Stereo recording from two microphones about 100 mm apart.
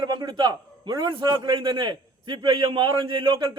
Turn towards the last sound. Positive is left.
turn(degrees=-55)  # may be behind; listen again after turning